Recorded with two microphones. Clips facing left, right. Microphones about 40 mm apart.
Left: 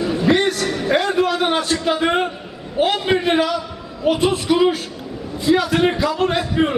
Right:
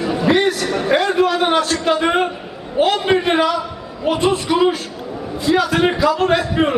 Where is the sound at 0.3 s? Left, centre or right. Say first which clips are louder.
Right 2 dB; centre.